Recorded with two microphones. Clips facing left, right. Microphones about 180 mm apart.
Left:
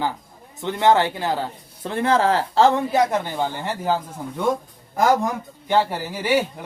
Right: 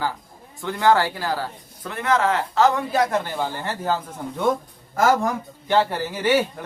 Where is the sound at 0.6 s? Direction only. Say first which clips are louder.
Left 1 dB; 20° left (ahead or behind).